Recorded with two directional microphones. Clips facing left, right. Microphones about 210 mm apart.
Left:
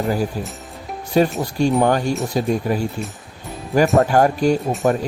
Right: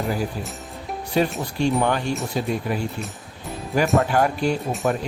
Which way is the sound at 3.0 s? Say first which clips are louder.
Left 3 dB; centre (ahead or behind).